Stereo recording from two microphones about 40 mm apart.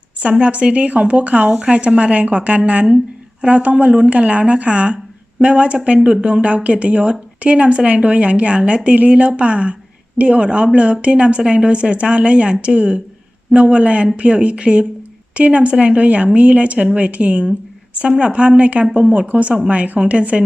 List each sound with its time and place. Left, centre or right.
0.2 s speech: right